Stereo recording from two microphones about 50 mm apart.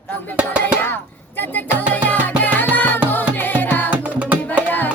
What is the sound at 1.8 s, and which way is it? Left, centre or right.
Music, left.